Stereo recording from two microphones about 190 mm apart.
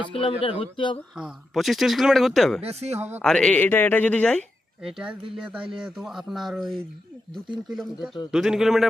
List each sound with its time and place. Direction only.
0.1 s speech: 30° left (ahead or behind)
1.1 s speech: centre (ahead or behind)
2.6 s speech: 35° right (ahead or behind)
3.2 s speech: 5° left (ahead or behind)
4.9 s speech: 5° right (ahead or behind)